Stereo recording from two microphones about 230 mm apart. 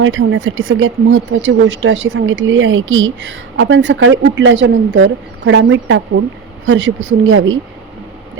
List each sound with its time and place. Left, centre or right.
0.0 s speech: right